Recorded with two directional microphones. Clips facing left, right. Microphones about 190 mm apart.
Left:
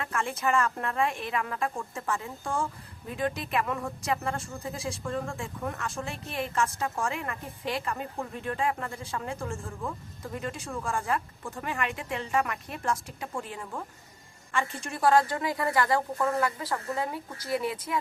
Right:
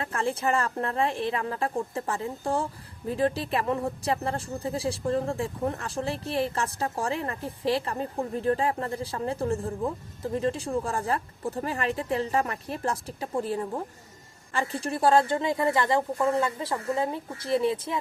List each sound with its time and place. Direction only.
0.0 s a woman's voice: 30° right (ahead or behind)